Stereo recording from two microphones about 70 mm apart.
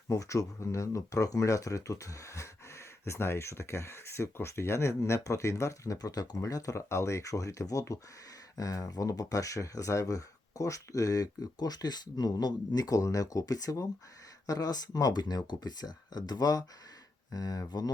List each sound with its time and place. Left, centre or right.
0.1 s speech: left